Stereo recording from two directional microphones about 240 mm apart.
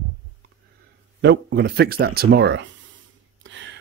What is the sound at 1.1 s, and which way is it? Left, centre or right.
Speech, right.